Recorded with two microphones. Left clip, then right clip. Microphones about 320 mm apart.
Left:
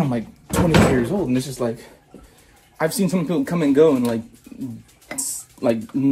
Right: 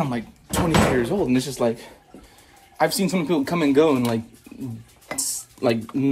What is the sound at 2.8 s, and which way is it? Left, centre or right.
Speech, centre.